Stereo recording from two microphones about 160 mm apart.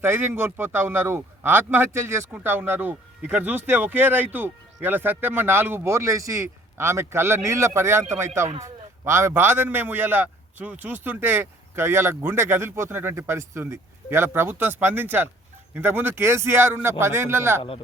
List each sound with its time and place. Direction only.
0.0 s a man's voice: 15° right (ahead or behind)